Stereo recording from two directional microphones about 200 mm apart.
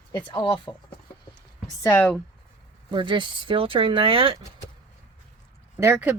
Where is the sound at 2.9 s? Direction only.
25° right (ahead or behind).